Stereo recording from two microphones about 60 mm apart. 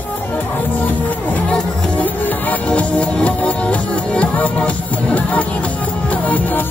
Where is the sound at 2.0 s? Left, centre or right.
Left.